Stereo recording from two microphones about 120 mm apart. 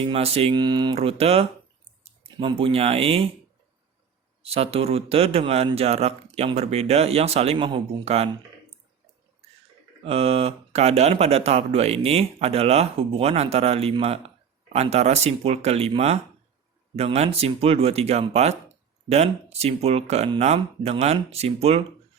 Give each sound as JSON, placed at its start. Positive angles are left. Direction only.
{"t": 0.0, "sound": "speech", "side_deg": -55}
{"t": 0.5, "sound": "speech", "side_deg": -40}
{"t": 0.9, "sound": "speech", "side_deg": -55}
{"t": 2.0, "sound": "a sound", "side_deg": -55}
{"t": 2.6, "sound": "speech", "side_deg": -55}
{"t": 4.4, "sound": "speech", "side_deg": -55}
{"t": 10.0, "sound": "speech", "side_deg": -55}
{"t": 16.9, "sound": "speech", "side_deg": -60}